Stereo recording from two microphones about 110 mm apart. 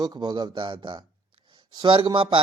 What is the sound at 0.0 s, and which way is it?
A man's voice, 35° right (ahead or behind).